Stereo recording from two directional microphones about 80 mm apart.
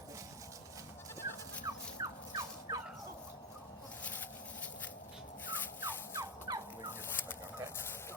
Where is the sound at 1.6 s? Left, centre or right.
Right.